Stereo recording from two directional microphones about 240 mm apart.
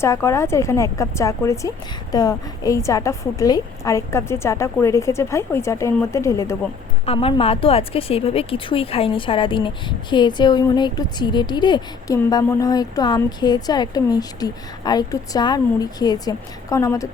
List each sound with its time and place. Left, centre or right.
0.0 s a woman's voice: centre
7.0 s a woman's voice: left